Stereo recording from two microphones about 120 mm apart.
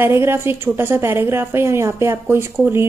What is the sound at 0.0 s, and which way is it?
A woman's voice, 20° right (ahead or behind).